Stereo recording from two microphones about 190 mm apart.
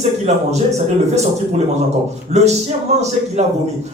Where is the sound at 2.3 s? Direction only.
35° right (ahead or behind).